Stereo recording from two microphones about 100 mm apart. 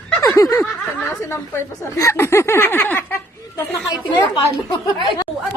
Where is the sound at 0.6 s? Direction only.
Centre (ahead or behind).